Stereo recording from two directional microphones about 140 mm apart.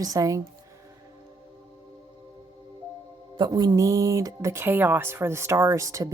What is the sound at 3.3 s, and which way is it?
Speech, 30° right (ahead or behind).